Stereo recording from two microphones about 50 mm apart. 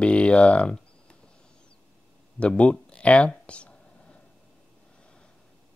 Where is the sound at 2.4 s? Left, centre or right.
Left.